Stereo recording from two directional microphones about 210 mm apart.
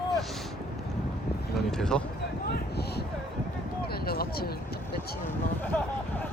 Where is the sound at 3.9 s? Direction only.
45° left (ahead or behind).